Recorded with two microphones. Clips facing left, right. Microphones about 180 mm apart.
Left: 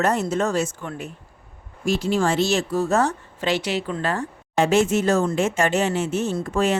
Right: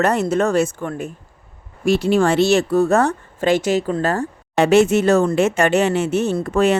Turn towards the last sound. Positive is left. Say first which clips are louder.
# right 5 dB
turn(degrees=-65)  # may be behind; listen again after turning